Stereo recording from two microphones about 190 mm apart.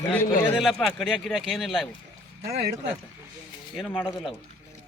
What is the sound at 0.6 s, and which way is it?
Speech, centre (ahead or behind).